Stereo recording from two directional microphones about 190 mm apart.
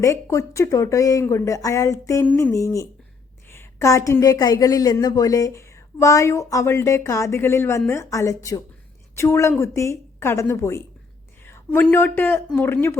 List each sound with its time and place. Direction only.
0.0 s a woman's voice: 15° left (ahead or behind)